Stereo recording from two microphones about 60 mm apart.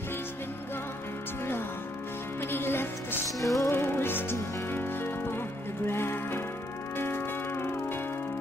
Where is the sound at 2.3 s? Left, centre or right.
Left.